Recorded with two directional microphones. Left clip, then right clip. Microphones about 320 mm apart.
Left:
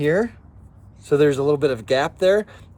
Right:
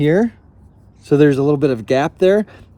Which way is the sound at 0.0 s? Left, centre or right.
Right.